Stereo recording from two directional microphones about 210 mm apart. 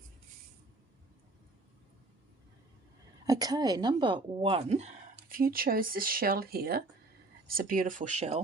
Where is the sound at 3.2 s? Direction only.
15° right (ahead or behind); by 8.4 s 30° right (ahead or behind).